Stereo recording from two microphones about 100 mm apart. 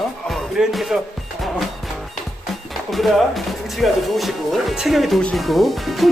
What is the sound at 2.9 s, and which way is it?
Speech, centre (ahead or behind).